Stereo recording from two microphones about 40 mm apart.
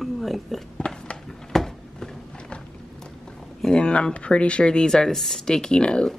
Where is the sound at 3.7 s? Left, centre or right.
Left.